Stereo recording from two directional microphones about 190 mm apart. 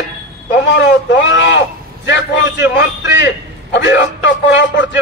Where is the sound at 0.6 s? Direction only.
65° left (ahead or behind).